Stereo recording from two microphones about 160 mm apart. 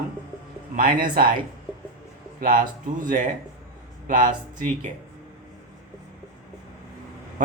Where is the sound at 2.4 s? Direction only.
60° right (ahead or behind).